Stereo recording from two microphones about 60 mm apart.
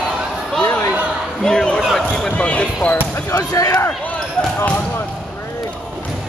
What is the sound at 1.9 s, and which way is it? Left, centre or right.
Basketball bounce, centre.